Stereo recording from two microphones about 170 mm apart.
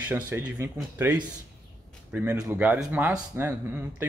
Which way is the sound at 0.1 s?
15° right (ahead or behind).